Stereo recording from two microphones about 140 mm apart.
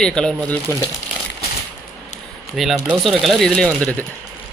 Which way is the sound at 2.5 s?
Centre (ahead or behind).